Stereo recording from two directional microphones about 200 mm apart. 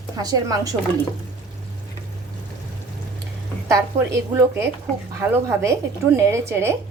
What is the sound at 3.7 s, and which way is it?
A woman's voice, 15° right (ahead or behind).